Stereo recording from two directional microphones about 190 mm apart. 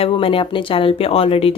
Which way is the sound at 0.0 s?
30° left (ahead or behind).